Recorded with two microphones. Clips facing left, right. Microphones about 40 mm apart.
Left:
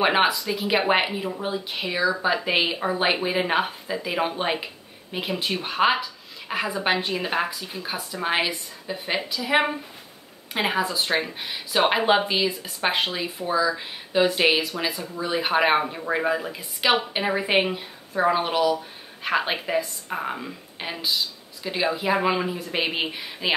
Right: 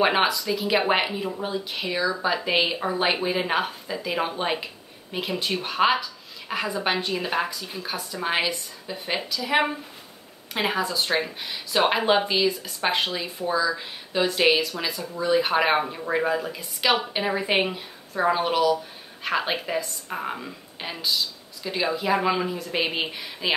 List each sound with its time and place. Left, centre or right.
0.0 s speech: centre
10.5 s speech: centre